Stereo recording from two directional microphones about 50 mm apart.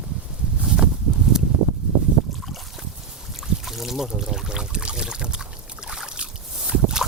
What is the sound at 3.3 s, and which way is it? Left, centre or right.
Pour, centre.